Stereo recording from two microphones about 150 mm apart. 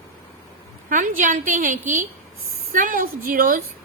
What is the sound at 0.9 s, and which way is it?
A woman's voice, 60° right (ahead or behind).